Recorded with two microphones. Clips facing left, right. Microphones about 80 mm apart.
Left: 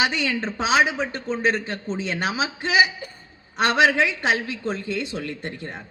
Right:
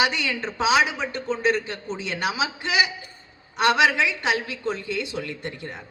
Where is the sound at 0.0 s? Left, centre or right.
Left.